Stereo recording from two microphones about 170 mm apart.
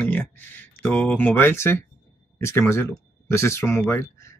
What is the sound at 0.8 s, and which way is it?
Speech, 10° left (ahead or behind).